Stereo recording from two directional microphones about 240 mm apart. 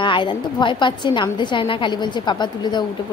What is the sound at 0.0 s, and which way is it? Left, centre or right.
A woman's voice, centre.